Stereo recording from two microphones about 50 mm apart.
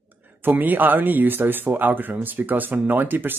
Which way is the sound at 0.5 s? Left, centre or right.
Right.